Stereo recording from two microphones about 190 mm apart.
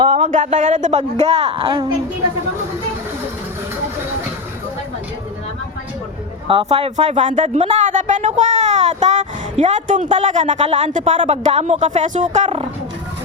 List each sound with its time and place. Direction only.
0.0 s a sound: 25° right (ahead or behind)
0.7 s speech: 40° right (ahead or behind)
6.5 s speech: 30° right (ahead or behind)